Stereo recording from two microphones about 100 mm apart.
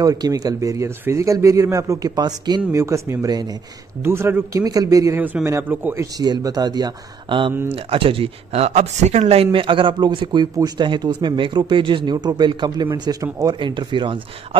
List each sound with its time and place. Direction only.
0.0 s speech: 35° right (ahead or behind)
2.7 s speech: 30° right (ahead or behind)
4.0 s speech: 25° right (ahead or behind)
5.2 s a man's voice: 15° right (ahead or behind)
5.9 s speech: 40° right (ahead or behind)
7.7 s speech: 70° right (ahead or behind); by 13.6 s 40° right (ahead or behind)
13.6 s speech: 50° right (ahead or behind)